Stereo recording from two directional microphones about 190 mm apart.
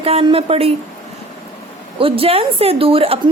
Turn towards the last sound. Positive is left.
turn(degrees=-30)  # may be behind; listen again after turning